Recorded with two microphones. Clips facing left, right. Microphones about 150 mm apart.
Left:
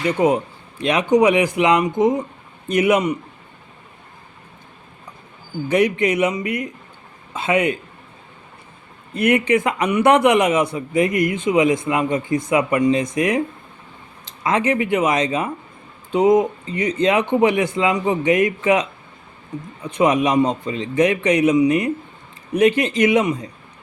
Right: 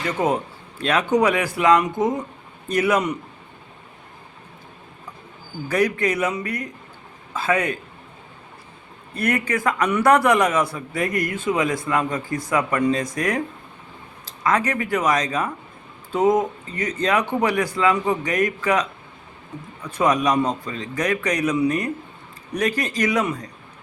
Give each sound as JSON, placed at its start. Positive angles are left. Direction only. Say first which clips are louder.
{"t": 0.2, "sound": "a man's voice", "louder": "left 3 dB", "side_deg": 15}
{"t": 5.6, "sound": "a man's voice", "louder": "left 3 dB", "side_deg": 20}
{"t": 9.1, "sound": "a man's voice", "louder": "left 6 dB", "side_deg": 20}
{"t": 14.4, "sound": "a man's voice", "louder": "left 3 dB", "side_deg": 25}